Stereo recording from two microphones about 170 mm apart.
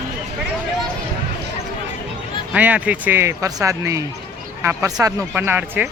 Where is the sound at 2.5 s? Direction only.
10° right (ahead or behind).